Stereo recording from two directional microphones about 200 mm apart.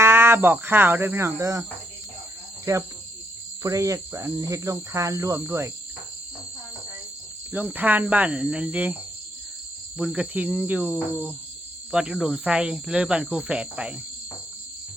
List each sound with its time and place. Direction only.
0.0 s speech: 10° right (ahead or behind)
2.7 s cricket: 15° right (ahead or behind)
7.5 s cricket: 10° right (ahead or behind)
10.0 s cricket: 5° right (ahead or behind)